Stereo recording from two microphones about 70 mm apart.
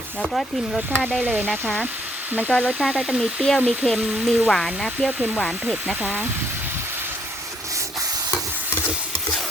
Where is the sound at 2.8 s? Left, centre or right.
Centre.